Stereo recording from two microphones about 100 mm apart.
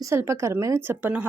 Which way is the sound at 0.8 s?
20° right (ahead or behind).